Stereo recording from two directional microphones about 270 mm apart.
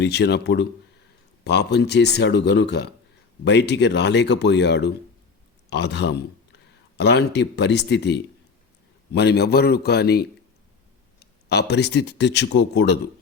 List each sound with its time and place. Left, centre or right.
0.0 s speech: left